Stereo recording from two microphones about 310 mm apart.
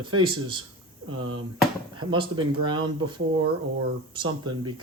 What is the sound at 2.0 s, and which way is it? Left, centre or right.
Speech, centre.